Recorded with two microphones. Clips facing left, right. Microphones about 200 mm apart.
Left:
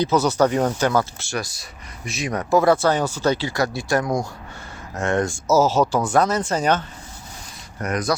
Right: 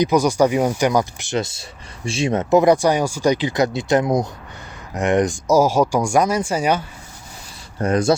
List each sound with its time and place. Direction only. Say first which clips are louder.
0.0 s speech: right 2 dB; 15° right (ahead or behind)
7.8 s speech: right 6 dB; 30° right (ahead or behind)